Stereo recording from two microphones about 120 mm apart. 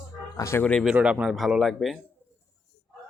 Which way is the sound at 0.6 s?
10° left (ahead or behind).